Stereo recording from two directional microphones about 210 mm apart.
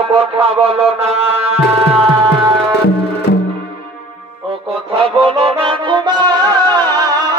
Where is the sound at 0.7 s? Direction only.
30° right (ahead or behind).